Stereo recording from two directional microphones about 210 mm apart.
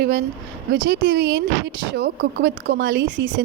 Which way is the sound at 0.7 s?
55° right (ahead or behind).